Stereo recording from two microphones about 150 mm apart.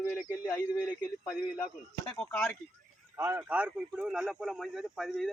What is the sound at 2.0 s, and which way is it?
Speech, 15° left (ahead or behind).